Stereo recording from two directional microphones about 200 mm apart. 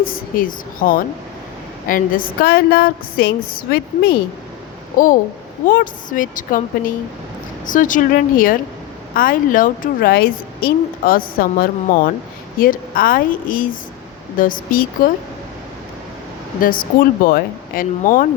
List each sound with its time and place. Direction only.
0.0 s speech: 45° left (ahead or behind)
16.6 s speech: 45° left (ahead or behind)